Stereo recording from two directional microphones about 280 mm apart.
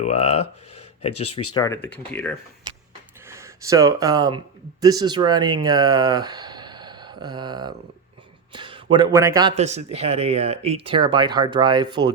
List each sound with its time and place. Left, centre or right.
0.0 s speech: left
1.5 s speech: centre
3.2 s a man's voice: centre